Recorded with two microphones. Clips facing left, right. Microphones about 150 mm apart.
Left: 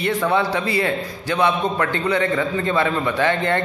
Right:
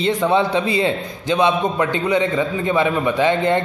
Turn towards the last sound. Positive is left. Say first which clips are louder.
# right 3 dB
turn(degrees=-15)  # may be behind; listen again after turning